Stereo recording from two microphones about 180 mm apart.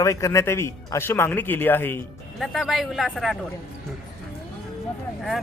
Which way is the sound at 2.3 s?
Centre (ahead or behind).